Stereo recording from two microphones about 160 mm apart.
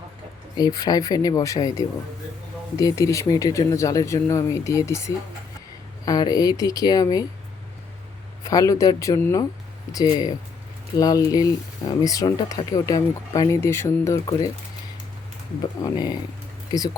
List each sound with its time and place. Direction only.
0.8 s speech: 25° left (ahead or behind)
8.4 s speech: 20° left (ahead or behind)
15.8 s speech: 25° left (ahead or behind)